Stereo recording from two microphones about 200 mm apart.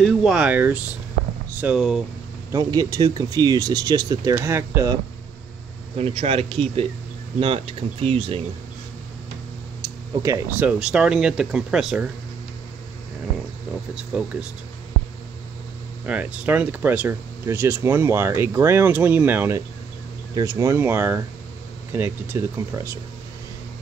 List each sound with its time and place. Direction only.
0.0 s speech: 5° right (ahead or behind)
2.5 s speech: 20° right (ahead or behind)
5.9 s speech: 30° right (ahead or behind)
10.2 s speech: 15° right (ahead or behind)
10.8 s speech: 5° right (ahead or behind)
13.9 s speech: 5° right (ahead or behind)
16.1 s speech: 5° right (ahead or behind)